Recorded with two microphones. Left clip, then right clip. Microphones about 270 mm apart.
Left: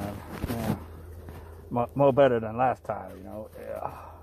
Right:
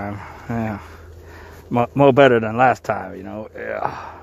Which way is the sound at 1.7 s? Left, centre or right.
Right.